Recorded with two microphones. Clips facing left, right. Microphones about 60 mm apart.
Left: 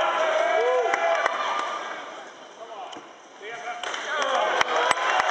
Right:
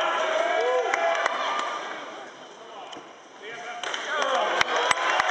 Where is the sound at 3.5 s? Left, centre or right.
Centre.